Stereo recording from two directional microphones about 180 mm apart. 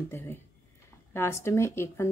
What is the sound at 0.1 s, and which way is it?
Speech, 15° left (ahead or behind).